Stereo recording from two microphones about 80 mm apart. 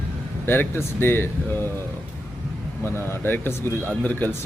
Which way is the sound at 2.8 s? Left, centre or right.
Left.